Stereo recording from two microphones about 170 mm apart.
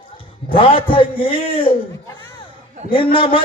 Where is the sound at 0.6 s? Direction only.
30° left (ahead or behind).